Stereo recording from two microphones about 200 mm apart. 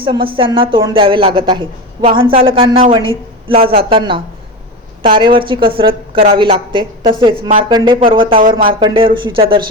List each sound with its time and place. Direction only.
0.0 s speech: 25° right (ahead or behind)
8.4 s speech: 45° right (ahead or behind)
8.8 s speech: 25° right (ahead or behind)